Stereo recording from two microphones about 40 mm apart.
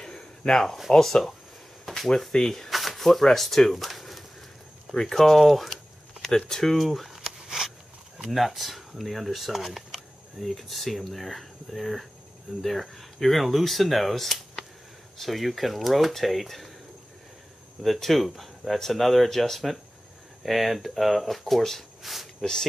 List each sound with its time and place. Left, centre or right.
0.0 s a sound: centre
0.9 s speech: centre
2.7 s a sound: centre
4.9 s speech: centre
6.2 s speech: centre
6.8 s a sound: centre
8.3 s speech: centre
18.0 s speech: centre
22.4 s speech: centre